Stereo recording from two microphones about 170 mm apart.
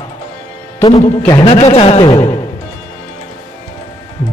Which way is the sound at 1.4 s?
35° left (ahead or behind).